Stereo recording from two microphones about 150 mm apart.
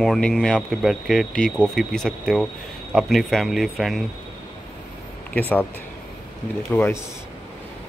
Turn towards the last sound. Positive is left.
turn(degrees=15)  # may be behind; listen again after turning